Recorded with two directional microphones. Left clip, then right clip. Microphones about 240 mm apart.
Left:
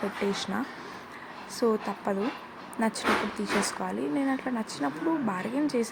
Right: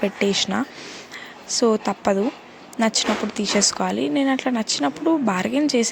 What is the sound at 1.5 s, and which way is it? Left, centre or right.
A woman's voice, right.